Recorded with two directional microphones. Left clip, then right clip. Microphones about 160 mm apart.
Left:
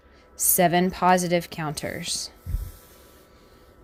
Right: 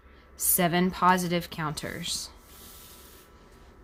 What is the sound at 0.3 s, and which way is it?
A woman's voice, 30° left (ahead or behind).